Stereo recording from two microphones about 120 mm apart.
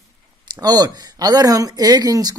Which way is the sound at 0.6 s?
35° right (ahead or behind).